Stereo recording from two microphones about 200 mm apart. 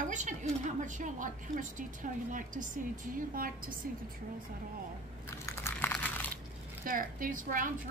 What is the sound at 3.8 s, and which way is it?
Speech, 45° right (ahead or behind).